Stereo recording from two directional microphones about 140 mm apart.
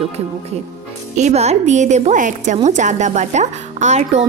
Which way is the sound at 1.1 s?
55° right (ahead or behind).